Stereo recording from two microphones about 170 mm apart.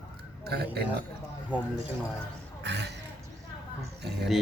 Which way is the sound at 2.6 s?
85° right.